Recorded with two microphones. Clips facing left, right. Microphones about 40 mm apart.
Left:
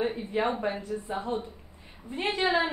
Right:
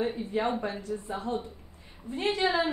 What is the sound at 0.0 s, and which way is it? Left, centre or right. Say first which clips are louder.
A woman's voice: left 1 dB; centre.